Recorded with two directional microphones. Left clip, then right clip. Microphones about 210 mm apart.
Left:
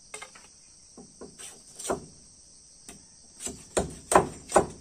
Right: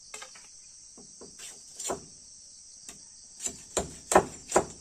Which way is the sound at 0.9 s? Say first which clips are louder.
Left 4 dB; 5° left (ahead or behind).